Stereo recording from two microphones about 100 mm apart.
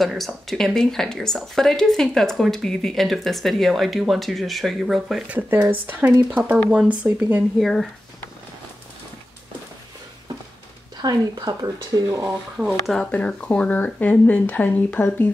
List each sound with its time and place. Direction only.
0.0 s speech: centre (ahead or behind)
5.3 s speech: 15° right (ahead or behind)
7.5 s speech: centre (ahead or behind)
11.0 s speech: 45° right (ahead or behind)
12.5 s speech: 5° right (ahead or behind)
13.1 s speech: 10° left (ahead or behind)